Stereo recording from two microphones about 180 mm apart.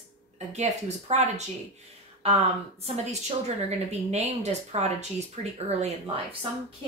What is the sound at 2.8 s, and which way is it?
Speech, 35° right (ahead or behind).